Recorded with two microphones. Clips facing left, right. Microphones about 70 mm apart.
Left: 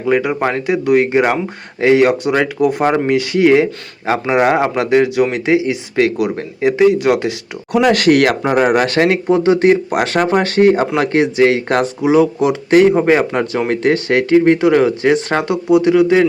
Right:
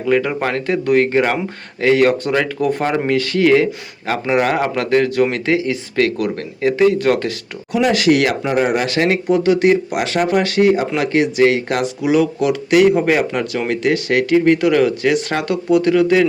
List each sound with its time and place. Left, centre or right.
0.0 s speech: centre
7.7 s speech: left
12.0 s speech: left
15.7 s speech: centre